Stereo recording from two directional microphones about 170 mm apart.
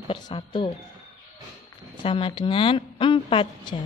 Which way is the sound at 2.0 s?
30° left (ahead or behind).